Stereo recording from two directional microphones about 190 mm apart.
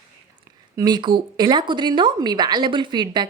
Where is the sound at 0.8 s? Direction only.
20° right (ahead or behind).